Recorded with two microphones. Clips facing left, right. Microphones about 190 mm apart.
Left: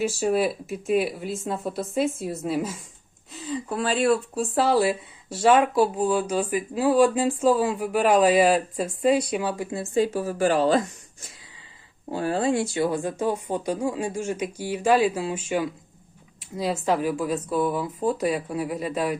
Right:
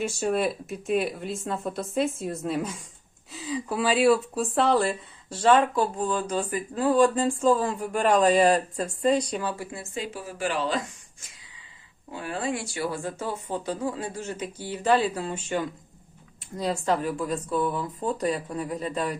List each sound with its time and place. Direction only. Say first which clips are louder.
0.0 s speech: left 3 dB; 5° left (ahead or behind)
9.7 s speech: left 11 dB; 35° left (ahead or behind)
12.1 s speech: left 7 dB; 35° left (ahead or behind); by 19.1 s 10° left (ahead or behind)